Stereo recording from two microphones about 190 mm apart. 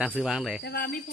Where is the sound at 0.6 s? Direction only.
55° left (ahead or behind).